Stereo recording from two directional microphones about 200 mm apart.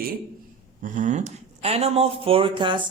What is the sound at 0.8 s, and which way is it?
Speech, 40° right (ahead or behind).